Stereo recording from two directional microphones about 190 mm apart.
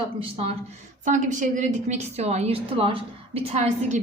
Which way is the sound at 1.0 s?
40° right (ahead or behind).